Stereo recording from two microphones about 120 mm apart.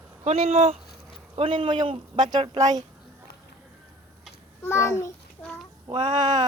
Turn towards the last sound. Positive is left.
turn(degrees=-35)  # may be behind; listen again after turning